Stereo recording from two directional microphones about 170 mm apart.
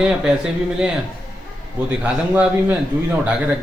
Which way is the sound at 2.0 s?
10° right (ahead or behind).